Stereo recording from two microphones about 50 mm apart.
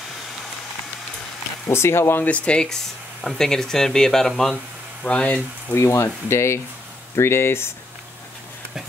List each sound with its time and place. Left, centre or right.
1.7 s speech: left
2.2 s speech: left; by 4.6 s centre
5.0 s speech: left
5.8 s speech: left
7.2 s speech: left